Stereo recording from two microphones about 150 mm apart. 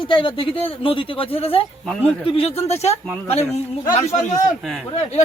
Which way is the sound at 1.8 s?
5° left (ahead or behind).